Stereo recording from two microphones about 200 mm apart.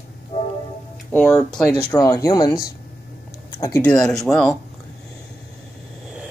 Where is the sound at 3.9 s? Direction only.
Centre (ahead or behind).